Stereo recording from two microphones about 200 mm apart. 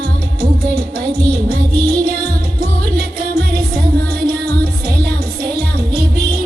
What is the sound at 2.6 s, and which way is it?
Music, 50° right (ahead or behind).